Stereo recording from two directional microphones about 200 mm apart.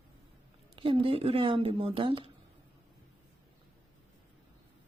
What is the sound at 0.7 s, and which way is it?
Speech, 25° right (ahead or behind).